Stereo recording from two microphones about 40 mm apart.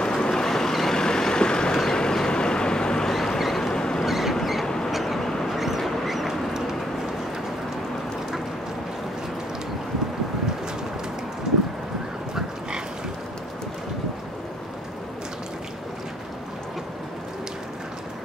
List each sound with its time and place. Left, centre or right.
0.0 s vehicle: centre
3.3 s vehicle: centre
3.7 s vehicle: centre
4.0 s vehicle: centre
4.6 s vehicle: centre
4.9 s vehicle: centre
5.5 s a sound: centre